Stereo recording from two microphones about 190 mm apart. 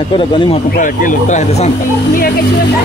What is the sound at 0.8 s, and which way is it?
Speech, 45° left (ahead or behind).